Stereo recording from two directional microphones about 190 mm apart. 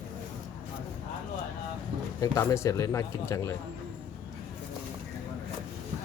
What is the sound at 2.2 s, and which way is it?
Speech, 15° left (ahead or behind).